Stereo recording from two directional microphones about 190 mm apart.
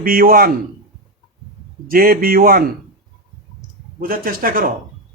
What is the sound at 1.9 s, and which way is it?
Speech, 50° right (ahead or behind).